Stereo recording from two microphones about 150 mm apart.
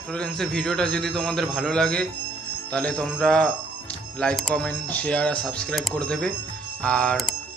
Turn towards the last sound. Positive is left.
turn(degrees=5)  # may be behind; listen again after turning